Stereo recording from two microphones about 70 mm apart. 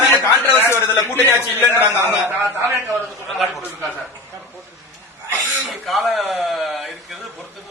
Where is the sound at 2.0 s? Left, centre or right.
Right.